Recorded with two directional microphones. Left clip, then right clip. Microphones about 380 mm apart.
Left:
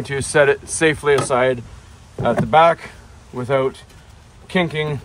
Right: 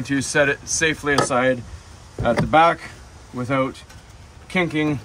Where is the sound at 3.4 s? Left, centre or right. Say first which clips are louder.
Left 4 dB; left.